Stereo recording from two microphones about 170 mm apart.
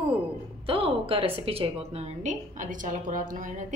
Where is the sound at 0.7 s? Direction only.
35° right (ahead or behind).